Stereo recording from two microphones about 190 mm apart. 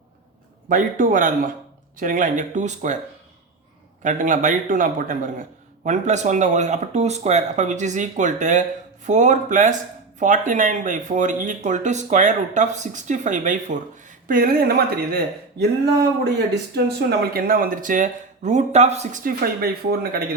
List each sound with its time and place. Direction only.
0.7 s speech: 45° right (ahead or behind)
4.0 s speech: 40° right (ahead or behind)
16.7 s speech: 55° right (ahead or behind)